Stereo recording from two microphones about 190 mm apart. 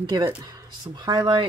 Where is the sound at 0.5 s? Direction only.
20° right (ahead or behind).